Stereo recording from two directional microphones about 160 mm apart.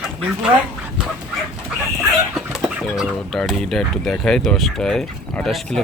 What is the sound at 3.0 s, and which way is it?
Speech, centre (ahead or behind).